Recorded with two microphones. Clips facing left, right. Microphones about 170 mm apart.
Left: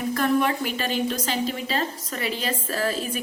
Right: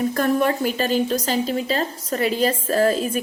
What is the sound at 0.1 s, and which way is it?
A woman's voice, 45° right (ahead or behind).